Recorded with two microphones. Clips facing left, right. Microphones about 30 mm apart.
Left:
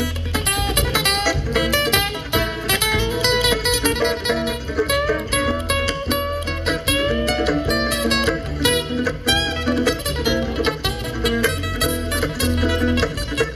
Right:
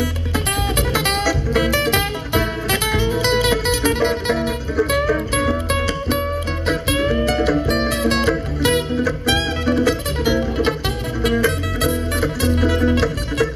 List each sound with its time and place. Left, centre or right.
0.7 s music: centre